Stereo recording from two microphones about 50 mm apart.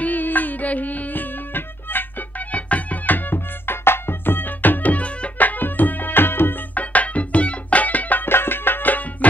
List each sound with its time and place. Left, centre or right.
0.0 s music: left
2.5 s music: left
6.7 s music: left
8.3 s music: left